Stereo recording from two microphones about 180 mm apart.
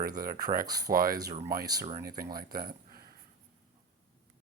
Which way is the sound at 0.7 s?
20° right (ahead or behind).